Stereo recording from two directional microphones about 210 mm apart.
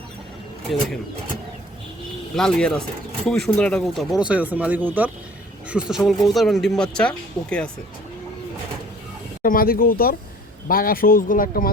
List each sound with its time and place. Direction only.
2.3 s speech: centre (ahead or behind)
9.4 s speech: 45° left (ahead or behind)